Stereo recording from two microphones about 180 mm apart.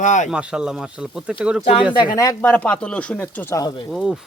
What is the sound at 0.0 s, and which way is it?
Speech, 45° left (ahead or behind).